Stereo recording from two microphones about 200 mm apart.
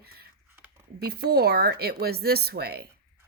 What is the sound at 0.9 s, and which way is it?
Speech, 55° right (ahead or behind).